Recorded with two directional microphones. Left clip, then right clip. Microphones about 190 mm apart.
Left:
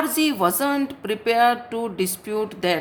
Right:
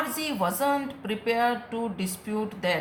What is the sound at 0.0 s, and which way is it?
Speech, 45° left (ahead or behind).